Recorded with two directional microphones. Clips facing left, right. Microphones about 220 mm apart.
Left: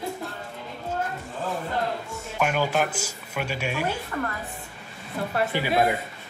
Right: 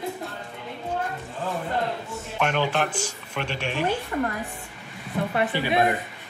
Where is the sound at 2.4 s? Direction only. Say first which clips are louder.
Even; 5° left (ahead or behind).